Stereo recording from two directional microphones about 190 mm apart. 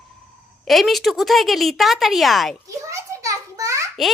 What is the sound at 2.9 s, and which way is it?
A child's voice, 15° right (ahead or behind).